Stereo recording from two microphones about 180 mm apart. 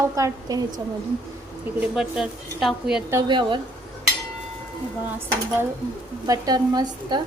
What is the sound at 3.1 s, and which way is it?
Speech, 20° right (ahead or behind).